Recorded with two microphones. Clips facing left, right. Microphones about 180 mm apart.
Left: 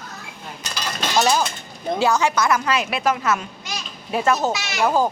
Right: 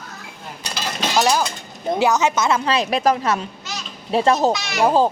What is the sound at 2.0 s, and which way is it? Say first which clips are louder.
A woman's voice: right 1 dB; 20° right (ahead or behind).